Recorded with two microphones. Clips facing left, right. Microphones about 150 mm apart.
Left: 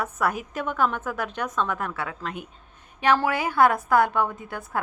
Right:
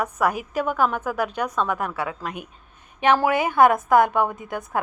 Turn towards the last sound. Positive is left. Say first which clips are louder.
# right 3 dB
turn(degrees=-15)  # may be behind; listen again after turning